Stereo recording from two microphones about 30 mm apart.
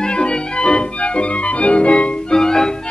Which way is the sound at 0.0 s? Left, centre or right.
Left.